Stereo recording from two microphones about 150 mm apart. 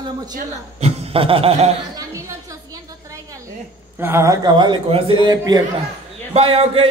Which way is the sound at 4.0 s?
20° right (ahead or behind).